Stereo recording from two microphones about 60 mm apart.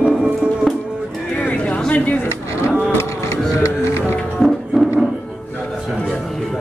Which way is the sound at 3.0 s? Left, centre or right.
Left.